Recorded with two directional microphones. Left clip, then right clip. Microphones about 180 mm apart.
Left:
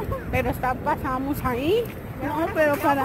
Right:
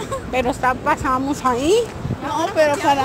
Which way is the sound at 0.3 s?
20° right (ahead or behind).